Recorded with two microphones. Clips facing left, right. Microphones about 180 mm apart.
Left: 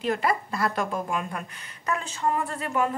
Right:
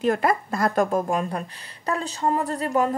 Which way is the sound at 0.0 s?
45° right (ahead or behind).